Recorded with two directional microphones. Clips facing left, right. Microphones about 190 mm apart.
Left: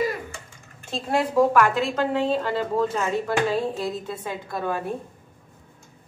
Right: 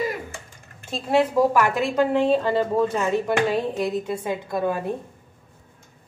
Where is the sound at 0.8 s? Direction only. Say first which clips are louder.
Right 4 dB; centre (ahead or behind); by 4.7 s 20° right (ahead or behind).